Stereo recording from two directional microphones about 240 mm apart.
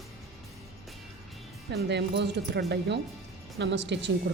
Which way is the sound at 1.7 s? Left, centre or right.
Right.